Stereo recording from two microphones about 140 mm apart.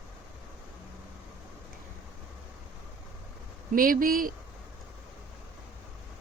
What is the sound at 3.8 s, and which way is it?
Speech, 90° right.